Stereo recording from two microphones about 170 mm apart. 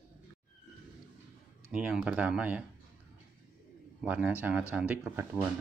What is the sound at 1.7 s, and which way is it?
Speech, 5° right (ahead or behind).